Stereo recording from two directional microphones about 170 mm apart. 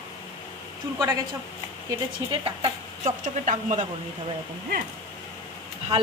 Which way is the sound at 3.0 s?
45° right (ahead or behind).